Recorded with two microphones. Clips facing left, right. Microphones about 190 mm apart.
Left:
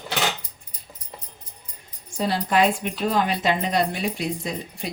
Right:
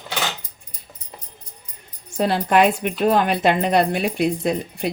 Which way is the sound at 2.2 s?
60° right (ahead or behind).